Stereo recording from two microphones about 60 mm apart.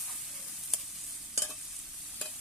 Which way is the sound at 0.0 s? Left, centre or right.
Centre.